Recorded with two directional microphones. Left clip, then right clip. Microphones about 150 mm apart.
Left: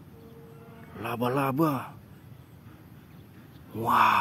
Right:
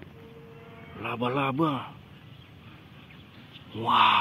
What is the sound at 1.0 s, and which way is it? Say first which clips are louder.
Speech: even; 20° left (ahead or behind).